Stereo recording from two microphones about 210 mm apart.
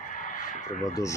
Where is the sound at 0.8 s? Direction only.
15° left (ahead or behind).